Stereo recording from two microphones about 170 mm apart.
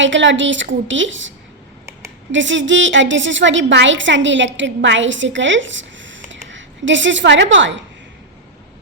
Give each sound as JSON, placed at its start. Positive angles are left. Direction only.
{"t": 0.0, "sound": "a woman's voice", "side_deg": -90}
{"t": 2.3, "sound": "a woman's voice", "side_deg": -90}